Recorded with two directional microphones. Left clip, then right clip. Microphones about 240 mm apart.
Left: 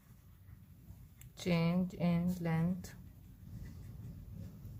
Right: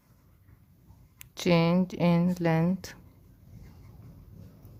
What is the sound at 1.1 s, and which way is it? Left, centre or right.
Speech, right.